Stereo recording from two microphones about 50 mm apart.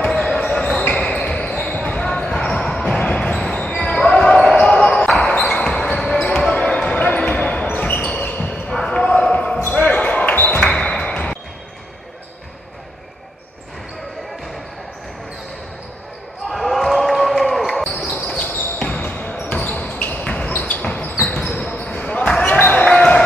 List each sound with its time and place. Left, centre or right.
0.1 s basketball bounce: left
2.0 s basketball bounce: centre
3.0 s basketball bounce: left
8.7 s basketball bounce: centre
16.4 s a sound: centre
18.4 s basketball bounce: left
22.6 s basketball bounce: left